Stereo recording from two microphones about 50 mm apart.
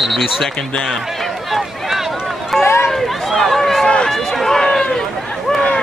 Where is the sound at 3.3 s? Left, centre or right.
Centre.